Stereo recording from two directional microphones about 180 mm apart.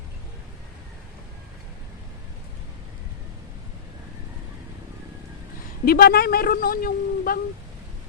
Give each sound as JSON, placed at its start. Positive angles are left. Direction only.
{"t": 5.8, "sound": "a woman's voice", "side_deg": 60}